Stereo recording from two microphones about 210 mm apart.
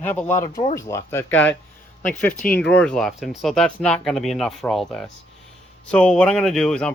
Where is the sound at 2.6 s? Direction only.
55° left (ahead or behind).